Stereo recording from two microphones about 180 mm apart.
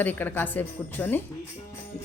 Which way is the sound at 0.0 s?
10° left (ahead or behind).